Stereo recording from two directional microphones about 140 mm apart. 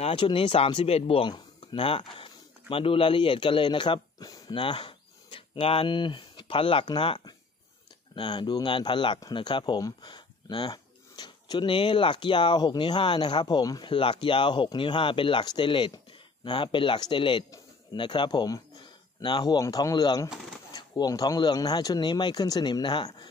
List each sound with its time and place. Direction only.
0.0 s speech: 40° left (ahead or behind)